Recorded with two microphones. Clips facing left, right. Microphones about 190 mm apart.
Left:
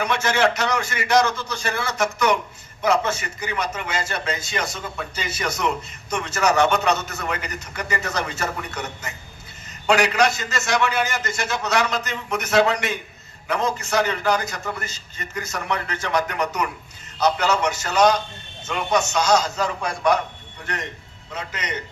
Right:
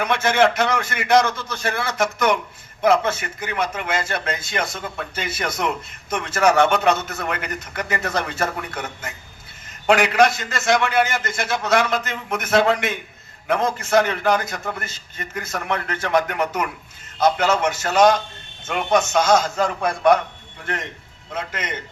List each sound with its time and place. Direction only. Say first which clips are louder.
0.0 s a man's voice: right 3 dB; 55° right (ahead or behind)
21.3 s a man's voice: right 2 dB; 55° right (ahead or behind)